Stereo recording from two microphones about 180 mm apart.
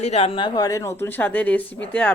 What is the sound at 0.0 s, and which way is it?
A woman's voice, 35° left (ahead or behind).